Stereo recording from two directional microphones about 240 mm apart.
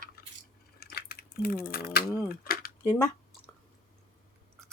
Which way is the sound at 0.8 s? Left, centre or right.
Left.